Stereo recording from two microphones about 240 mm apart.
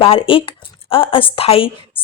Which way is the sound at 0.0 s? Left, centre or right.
Left.